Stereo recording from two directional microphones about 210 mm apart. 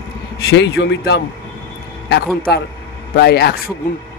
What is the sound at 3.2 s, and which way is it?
Speech, 50° left (ahead or behind).